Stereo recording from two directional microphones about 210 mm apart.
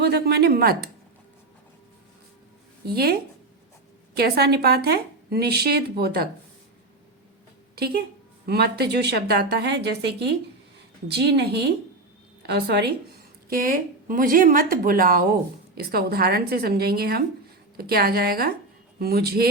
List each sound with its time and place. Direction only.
0.0 s a woman's voice: 50° right (ahead or behind)
2.8 s a woman's voice: 50° right (ahead or behind)
4.2 s a woman's voice: 50° right (ahead or behind)
8.4 s a woman's voice: 50° right (ahead or behind)